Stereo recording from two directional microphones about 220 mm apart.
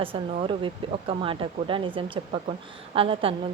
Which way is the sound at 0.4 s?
25° right (ahead or behind).